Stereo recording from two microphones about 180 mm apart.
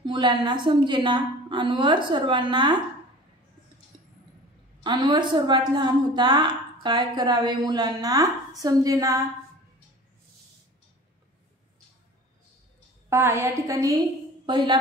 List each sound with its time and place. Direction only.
0.0 s a woman's voice: 25° right (ahead or behind)
4.8 s a woman's voice: 25° right (ahead or behind)
13.1 s a woman's voice: 15° right (ahead or behind)